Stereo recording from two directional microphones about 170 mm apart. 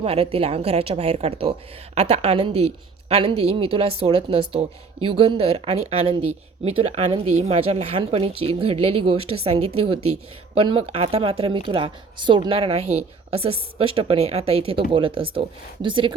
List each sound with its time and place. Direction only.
0.0 s speech: 35° right (ahead or behind)